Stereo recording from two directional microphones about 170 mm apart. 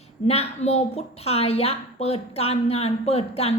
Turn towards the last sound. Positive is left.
turn(degrees=35)  # may be behind; listen again after turning